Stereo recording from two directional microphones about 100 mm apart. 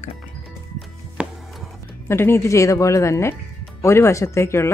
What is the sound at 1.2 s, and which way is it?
Music, 10° right (ahead or behind).